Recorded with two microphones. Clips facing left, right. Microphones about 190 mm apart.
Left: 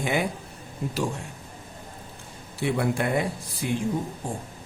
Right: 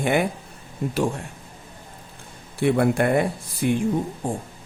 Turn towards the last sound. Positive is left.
turn(degrees=-55)  # may be behind; listen again after turning